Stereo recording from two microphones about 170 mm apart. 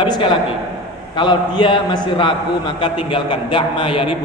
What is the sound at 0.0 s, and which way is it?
A man's voice, 30° left (ahead or behind).